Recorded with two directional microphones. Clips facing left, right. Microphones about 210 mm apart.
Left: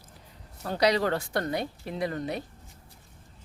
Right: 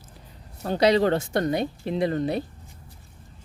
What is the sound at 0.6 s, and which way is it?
Speech, 25° right (ahead or behind).